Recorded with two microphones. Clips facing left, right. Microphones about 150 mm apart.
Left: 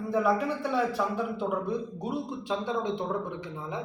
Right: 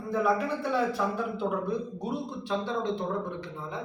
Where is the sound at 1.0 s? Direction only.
5° left (ahead or behind).